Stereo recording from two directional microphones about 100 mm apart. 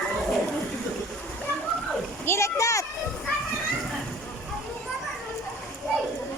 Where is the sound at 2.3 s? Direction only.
30° left (ahead or behind).